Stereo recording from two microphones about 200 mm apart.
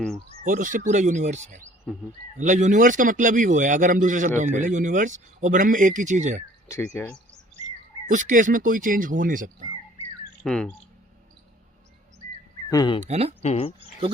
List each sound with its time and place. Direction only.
0.4 s speech: 40° right (ahead or behind)
6.7 s speech: 10° left (ahead or behind)
8.0 s speech: 40° right (ahead or behind)
10.4 s speech: 5° left (ahead or behind)
12.7 s speech: 20° left (ahead or behind)
13.0 s speech: 30° right (ahead or behind)
13.4 s speech: 30° left (ahead or behind)